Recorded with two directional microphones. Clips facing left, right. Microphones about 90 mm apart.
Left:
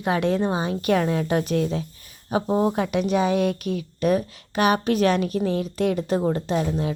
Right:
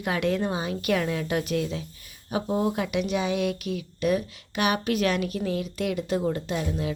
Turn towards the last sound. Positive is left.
turn(degrees=35)  # may be behind; listen again after turning